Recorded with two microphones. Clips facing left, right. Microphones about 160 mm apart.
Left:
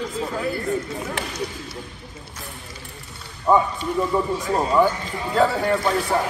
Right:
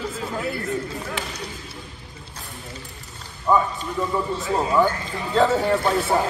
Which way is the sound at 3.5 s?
15° left (ahead or behind).